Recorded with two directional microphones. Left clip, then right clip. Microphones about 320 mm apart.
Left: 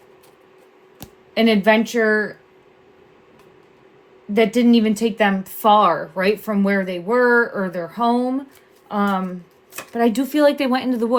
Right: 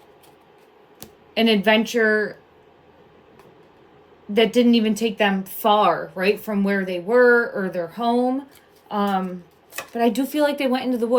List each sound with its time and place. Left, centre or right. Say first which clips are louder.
0.9 s speech: left 2 dB; centre
4.4 s speech: left 1 dB; centre